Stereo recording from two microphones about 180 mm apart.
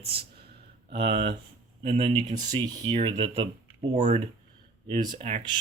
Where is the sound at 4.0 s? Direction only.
40° right (ahead or behind).